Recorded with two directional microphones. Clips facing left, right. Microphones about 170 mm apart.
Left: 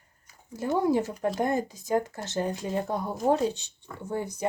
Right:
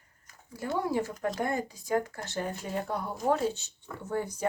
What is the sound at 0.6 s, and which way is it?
Speech, 20° left (ahead or behind).